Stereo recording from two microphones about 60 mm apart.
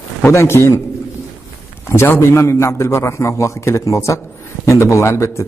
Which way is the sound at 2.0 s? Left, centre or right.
Left.